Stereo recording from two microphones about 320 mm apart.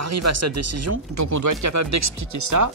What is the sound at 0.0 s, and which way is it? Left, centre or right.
Speech, right.